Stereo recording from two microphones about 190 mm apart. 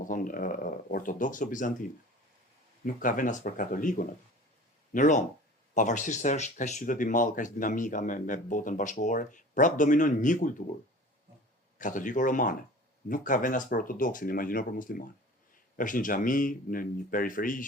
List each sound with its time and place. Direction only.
0.0 s speech: 45° left (ahead or behind)
2.8 s speech: 45° left (ahead or behind)
11.8 s speech: 45° left (ahead or behind)